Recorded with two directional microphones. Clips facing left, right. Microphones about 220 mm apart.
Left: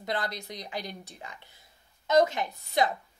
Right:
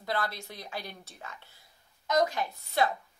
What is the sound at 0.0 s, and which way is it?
Speech, 20° left (ahead or behind).